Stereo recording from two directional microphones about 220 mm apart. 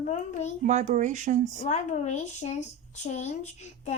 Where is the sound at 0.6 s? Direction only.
30° right (ahead or behind).